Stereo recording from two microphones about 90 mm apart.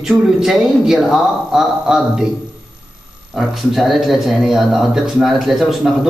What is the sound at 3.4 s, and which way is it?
Speech, centre (ahead or behind).